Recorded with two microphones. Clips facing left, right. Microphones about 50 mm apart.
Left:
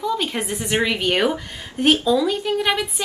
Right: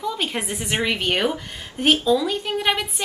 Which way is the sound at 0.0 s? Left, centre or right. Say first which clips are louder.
Left 3 dB; centre.